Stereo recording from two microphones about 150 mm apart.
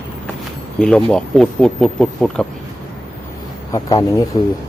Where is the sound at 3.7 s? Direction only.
25° left (ahead or behind).